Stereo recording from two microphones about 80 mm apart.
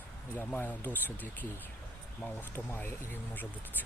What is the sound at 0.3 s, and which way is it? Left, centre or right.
Speech, left.